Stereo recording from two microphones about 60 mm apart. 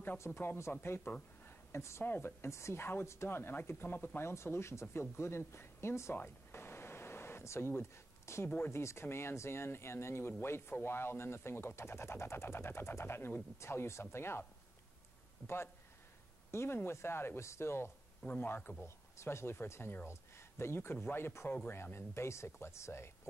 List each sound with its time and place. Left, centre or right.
0.2 s speech: left
1.7 s speech: left
2.0 s speech: left
6.1 s a sound: left
8.5 s speech: left
8.7 s speech: left
15.4 s speech: left
18.4 s speech: left
19.1 s speech: left